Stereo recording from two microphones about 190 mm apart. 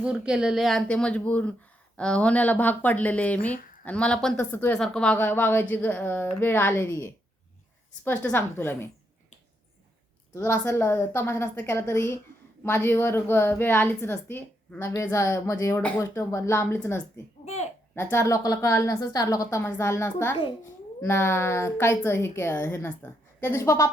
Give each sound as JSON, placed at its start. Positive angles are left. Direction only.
{"t": 0.0, "sound": "a woman's voice", "side_deg": -5}
{"t": 10.3, "sound": "speech", "side_deg": 15}
{"t": 17.4, "sound": "babbling", "side_deg": 35}
{"t": 17.9, "sound": "speech", "side_deg": 15}